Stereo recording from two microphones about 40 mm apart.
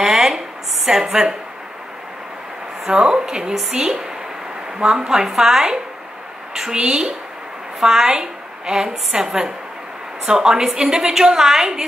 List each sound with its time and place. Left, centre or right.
0.0 s a sound: centre
0.8 s a woman's voice: centre
2.9 s a woman's voice: right